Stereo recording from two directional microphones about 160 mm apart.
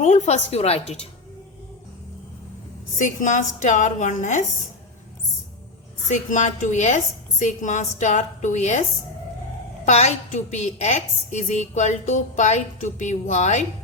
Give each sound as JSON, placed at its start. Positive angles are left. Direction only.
{"t": 0.0, "sound": "a woman's voice", "side_deg": 45}
{"t": 3.0, "sound": "a woman's voice", "side_deg": 50}
{"t": 6.1, "sound": "a woman's voice", "side_deg": 50}
{"t": 9.8, "sound": "a woman's voice", "side_deg": 45}